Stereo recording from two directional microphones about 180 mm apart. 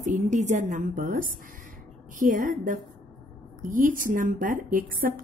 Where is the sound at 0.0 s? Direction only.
40° right (ahead or behind).